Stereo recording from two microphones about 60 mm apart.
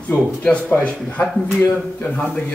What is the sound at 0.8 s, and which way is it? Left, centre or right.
Speech, left.